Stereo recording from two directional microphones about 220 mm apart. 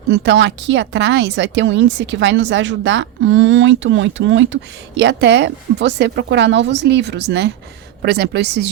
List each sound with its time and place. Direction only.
0.1 s a woman's voice: 55° right (ahead or behind)